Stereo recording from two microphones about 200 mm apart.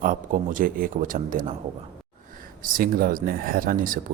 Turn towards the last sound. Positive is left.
turn(degrees=-45)  # may be behind; listen again after turning